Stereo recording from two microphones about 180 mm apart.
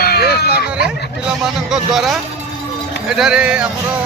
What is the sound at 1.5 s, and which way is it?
Speech, centre (ahead or behind).